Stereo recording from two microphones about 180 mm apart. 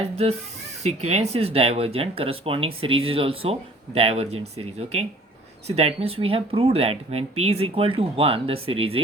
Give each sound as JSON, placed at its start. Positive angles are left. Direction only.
{"t": 0.0, "sound": "speech", "side_deg": -35}